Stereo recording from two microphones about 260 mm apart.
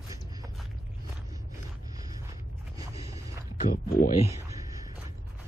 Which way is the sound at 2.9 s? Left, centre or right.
Centre.